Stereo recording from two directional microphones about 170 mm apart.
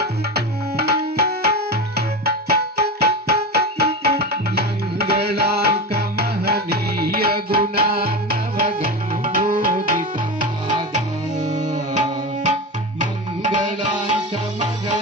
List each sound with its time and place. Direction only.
0.7 s tabla: 70° right (ahead or behind)
9.6 s music: 60° right (ahead or behind)